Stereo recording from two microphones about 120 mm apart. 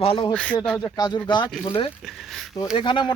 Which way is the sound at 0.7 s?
30° left (ahead or behind).